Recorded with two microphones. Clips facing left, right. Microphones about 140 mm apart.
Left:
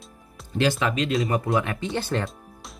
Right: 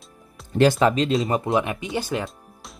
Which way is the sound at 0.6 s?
40° right (ahead or behind).